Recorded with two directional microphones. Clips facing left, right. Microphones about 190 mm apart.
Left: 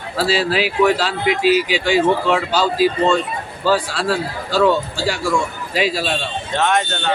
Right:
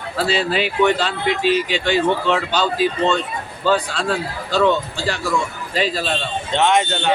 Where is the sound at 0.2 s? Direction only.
5° left (ahead or behind).